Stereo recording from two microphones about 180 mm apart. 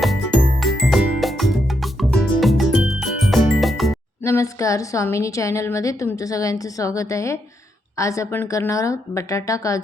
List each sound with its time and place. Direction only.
0.0 s music: centre (ahead or behind)
4.2 s a woman's voice: 15° left (ahead or behind)